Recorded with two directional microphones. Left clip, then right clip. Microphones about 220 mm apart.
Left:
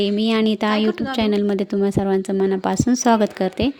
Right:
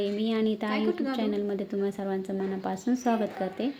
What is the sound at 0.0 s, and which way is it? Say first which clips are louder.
Speech: left 9 dB; 50° left (ahead or behind).